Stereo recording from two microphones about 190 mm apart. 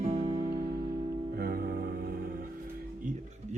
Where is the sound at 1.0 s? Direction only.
25° right (ahead or behind).